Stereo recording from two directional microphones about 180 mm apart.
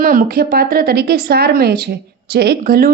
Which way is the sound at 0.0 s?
50° right (ahead or behind).